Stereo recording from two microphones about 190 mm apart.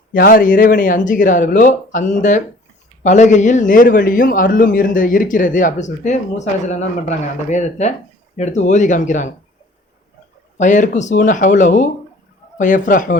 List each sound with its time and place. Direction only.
0.1 s a man's voice: 50° left (ahead or behind)
10.6 s a man's voice: 40° left (ahead or behind)